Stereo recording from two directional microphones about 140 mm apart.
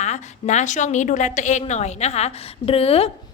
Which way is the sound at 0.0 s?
55° left (ahead or behind).